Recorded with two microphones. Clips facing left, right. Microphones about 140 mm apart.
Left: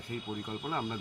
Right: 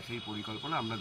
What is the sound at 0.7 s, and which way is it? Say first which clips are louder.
Speech: left 1 dB; 15° left (ahead or behind).